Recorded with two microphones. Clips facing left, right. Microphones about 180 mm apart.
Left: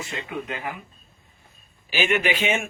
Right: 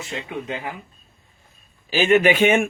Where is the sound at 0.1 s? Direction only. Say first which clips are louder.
Right 5 dB; 30° right (ahead or behind).